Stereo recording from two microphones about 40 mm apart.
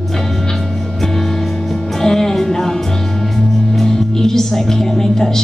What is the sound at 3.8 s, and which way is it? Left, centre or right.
Speech, centre.